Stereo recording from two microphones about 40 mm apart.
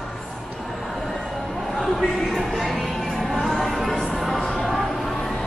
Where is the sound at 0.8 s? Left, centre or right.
Centre.